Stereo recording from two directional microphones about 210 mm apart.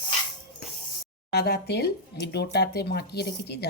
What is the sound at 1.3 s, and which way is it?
Speech, 50° left (ahead or behind).